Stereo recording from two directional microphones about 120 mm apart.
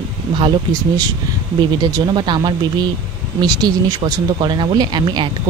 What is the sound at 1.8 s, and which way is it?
Speech, 35° right (ahead or behind).